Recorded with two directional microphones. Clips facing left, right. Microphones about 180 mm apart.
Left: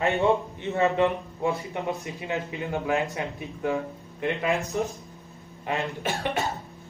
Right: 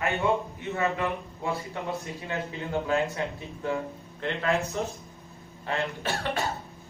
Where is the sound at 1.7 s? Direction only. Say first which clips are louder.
Left 3 dB; 15° left (ahead or behind).